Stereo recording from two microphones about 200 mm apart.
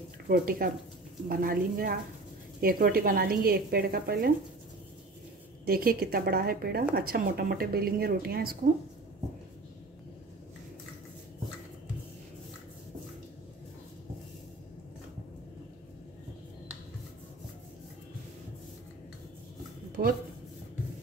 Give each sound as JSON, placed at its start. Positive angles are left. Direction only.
{"t": 0.3, "sound": "a woman's voice", "side_deg": -45}
{"t": 5.7, "sound": "a woman's voice", "side_deg": -50}
{"t": 20.0, "sound": "a sound", "side_deg": -45}